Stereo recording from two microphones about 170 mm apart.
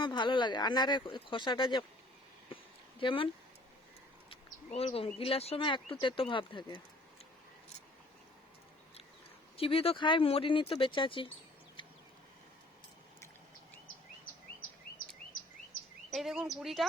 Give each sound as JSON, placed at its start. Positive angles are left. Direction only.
{"t": 0.0, "sound": "speech", "side_deg": 25}
{"t": 3.0, "sound": "speech", "side_deg": 30}
{"t": 4.3, "sound": "speech", "side_deg": 35}
{"t": 9.6, "sound": "speech", "side_deg": 35}
{"t": 11.8, "sound": "a sound", "side_deg": 30}
{"t": 14.3, "sound": "bird vocalization", "side_deg": 55}
{"t": 16.0, "sound": "speech", "side_deg": 0}